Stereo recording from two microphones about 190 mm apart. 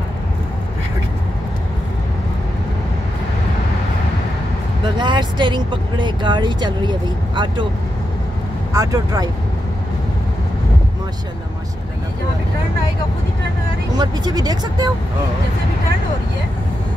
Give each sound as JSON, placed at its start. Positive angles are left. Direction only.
{"t": 4.8, "sound": "speech", "side_deg": -25}
{"t": 8.7, "sound": "speech", "side_deg": -20}
{"t": 13.9, "sound": "speech", "side_deg": -20}